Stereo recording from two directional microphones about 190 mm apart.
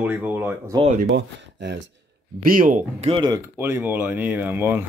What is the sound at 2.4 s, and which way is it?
Speech, 45° right (ahead or behind).